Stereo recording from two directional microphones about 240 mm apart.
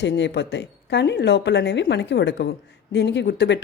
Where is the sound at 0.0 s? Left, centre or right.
Left.